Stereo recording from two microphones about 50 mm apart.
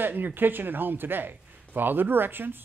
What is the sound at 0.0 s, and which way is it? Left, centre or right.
Speech, right.